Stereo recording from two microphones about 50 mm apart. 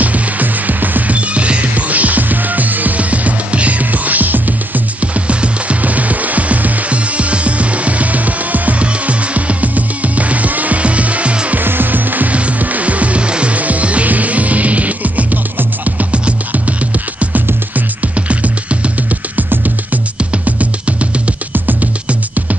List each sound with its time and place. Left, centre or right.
0.0 s music: right
11.5 s music: right
17.7 s music: right
20.2 s music: right